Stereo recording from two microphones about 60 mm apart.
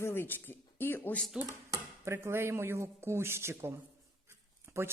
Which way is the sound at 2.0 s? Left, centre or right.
Right.